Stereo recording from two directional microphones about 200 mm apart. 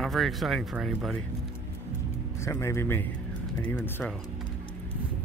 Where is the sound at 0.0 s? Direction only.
Centre (ahead or behind).